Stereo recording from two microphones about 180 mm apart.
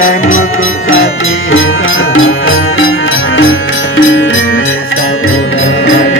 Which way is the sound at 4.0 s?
90° left.